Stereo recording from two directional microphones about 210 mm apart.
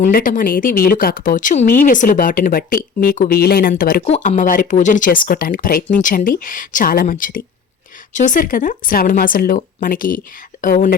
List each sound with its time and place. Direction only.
0.0 s speech: 40° left (ahead or behind)